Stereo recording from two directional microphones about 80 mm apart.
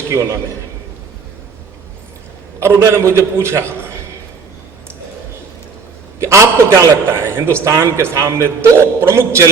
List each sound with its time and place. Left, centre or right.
0.1 s a man's voice: right
2.6 s a man's voice: right
6.1 s a man's voice: right